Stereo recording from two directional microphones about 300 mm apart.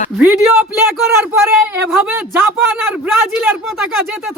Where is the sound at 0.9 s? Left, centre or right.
Centre.